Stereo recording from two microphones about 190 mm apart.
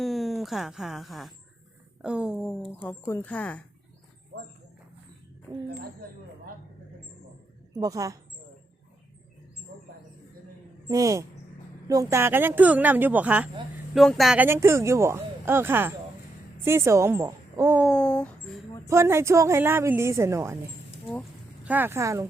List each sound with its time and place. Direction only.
0.0 s a woman's voice: centre (ahead or behind)
7.7 s speech: 15° right (ahead or behind)
10.8 s speech: 15° right (ahead or behind)
17.8 s speech: 5° left (ahead or behind)
18.9 s speech: 15° right (ahead or behind)
21.6 s speech: 10° right (ahead or behind)